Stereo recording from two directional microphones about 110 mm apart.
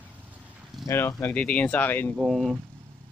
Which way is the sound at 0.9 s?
20° left (ahead or behind).